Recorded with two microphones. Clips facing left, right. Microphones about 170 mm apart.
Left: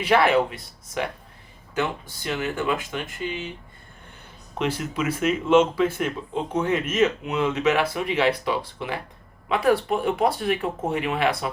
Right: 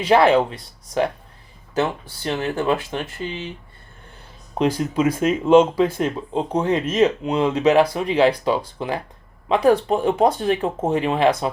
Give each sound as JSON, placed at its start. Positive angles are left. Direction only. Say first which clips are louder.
{"t": 0.1, "sound": "speech", "louder": "right 4 dB", "side_deg": -30}
{"t": 1.7, "sound": "speech", "louder": "right 4 dB", "side_deg": -35}
{"t": 4.5, "sound": "speech", "louder": "right 7 dB", "side_deg": -35}